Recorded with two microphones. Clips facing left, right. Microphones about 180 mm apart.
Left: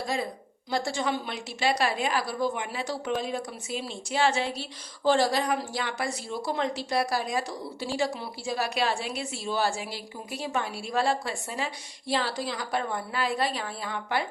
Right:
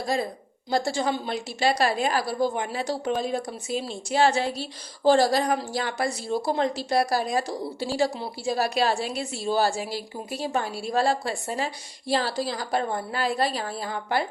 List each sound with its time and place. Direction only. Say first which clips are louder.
0.7 s a woman's voice: right 3 dB; 35° right (ahead or behind)